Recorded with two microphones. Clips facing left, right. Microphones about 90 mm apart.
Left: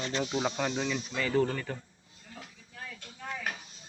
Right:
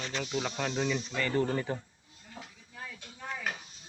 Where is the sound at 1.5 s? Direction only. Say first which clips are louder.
Right 3 dB; 20° right (ahead or behind).